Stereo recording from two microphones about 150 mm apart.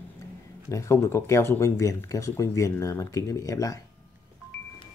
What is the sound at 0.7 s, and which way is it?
Speech, 20° left (ahead or behind).